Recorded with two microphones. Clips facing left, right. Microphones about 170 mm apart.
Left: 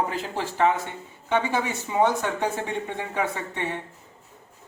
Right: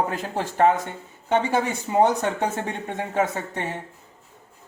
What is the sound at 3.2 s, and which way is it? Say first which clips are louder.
Speech: right 4 dB; 45° right (ahead or behind).